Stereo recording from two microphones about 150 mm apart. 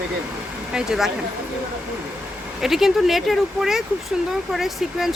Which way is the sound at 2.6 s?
Centre (ahead or behind).